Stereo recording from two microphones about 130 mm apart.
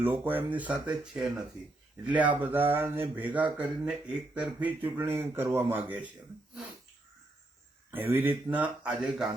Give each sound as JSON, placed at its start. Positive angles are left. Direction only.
{"t": 0.0, "sound": "speech", "side_deg": -15}
{"t": 7.9, "sound": "speech", "side_deg": -15}